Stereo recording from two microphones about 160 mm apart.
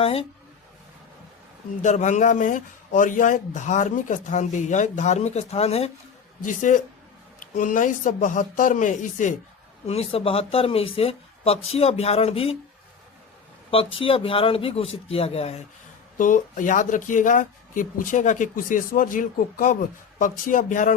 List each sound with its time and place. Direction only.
0.0 s speech: 40° left (ahead or behind)
1.8 s speech: 50° left (ahead or behind)
6.4 s speech: 55° left (ahead or behind)
9.8 s speech: 40° left (ahead or behind)
13.7 s speech: 35° left (ahead or behind)
16.1 s speech: 55° left (ahead or behind)